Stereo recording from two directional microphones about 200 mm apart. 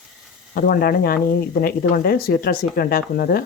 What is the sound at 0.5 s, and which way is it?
Speech, 45° left (ahead or behind).